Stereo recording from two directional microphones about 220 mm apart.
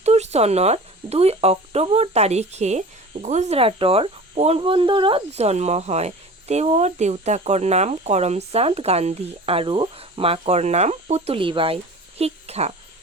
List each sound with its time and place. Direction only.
0.0 s speech: 30° right (ahead or behind)